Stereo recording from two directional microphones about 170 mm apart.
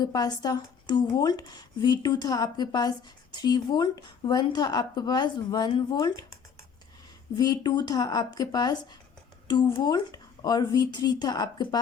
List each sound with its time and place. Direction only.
0.0 s a woman's voice: 25° left (ahead or behind)
7.3 s a woman's voice: 25° left (ahead or behind)